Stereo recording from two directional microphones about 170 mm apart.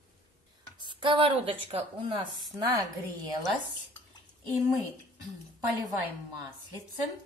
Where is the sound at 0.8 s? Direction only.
30° right (ahead or behind).